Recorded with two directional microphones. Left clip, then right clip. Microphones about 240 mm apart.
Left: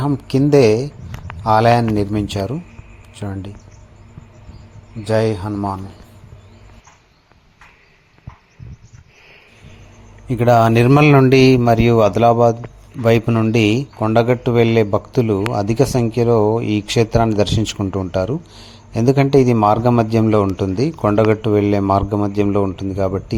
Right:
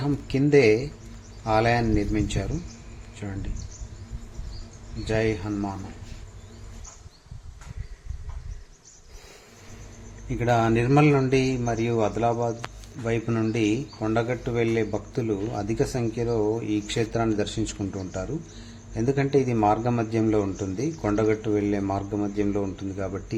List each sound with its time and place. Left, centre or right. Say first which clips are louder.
0.0 s speech: left 8 dB; left
5.0 s speech: left 8 dB; left
10.2 s a man's voice: left 10 dB; left